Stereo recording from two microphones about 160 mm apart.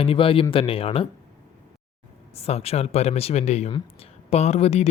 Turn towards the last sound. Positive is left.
turn(degrees=40)  # may be behind; listen again after turning